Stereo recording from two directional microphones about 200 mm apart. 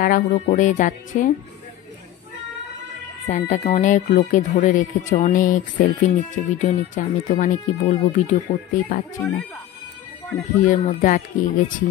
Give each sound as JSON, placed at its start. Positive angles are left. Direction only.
{"t": 0.0, "sound": "speech", "side_deg": 40}
{"t": 3.3, "sound": "speech", "side_deg": 40}
{"t": 10.6, "sound": "speech", "side_deg": 40}